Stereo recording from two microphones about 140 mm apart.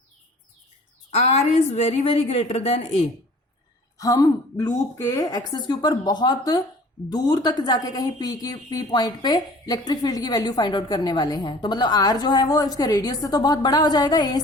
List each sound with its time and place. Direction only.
1.1 s a woman's voice: 50° left (ahead or behind)
3.9 s a woman's voice: 25° left (ahead or behind)